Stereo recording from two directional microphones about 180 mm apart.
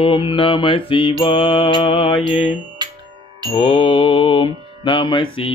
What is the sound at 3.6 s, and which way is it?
Mantra, 25° left (ahead or behind).